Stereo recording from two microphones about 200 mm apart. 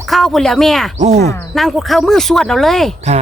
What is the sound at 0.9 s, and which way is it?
Speech, 35° right (ahead or behind).